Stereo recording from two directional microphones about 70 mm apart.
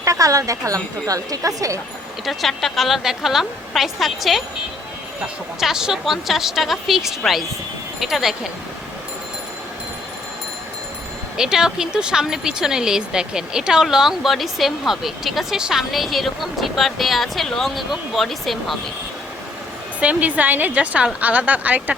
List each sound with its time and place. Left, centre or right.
0.0 s a woman's voice: right
2.2 s speech: centre
5.5 s speech: centre
11.3 s speech: centre
20.0 s a woman's voice: right